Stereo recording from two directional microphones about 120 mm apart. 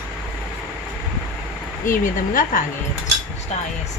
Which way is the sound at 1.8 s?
90° left.